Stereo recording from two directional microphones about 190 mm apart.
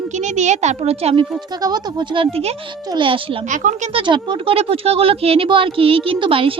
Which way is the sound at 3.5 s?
40° right (ahead or behind).